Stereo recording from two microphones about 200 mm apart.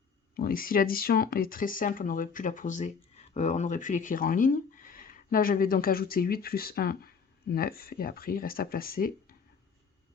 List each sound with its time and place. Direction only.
0.3 s speech: 45° left (ahead or behind)